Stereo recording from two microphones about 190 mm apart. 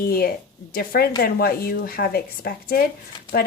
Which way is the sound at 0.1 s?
50° left (ahead or behind).